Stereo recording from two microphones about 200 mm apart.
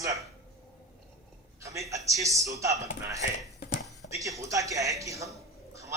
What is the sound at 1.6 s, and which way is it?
A man's voice, 15° right (ahead or behind).